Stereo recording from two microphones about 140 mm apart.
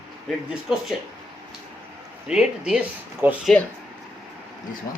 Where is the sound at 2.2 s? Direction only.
5° right (ahead or behind).